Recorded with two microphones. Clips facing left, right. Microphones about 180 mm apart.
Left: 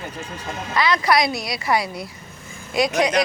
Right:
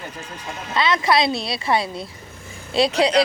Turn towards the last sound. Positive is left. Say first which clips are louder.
# right 2 dB
turn(degrees=-30)  # may be behind; listen again after turning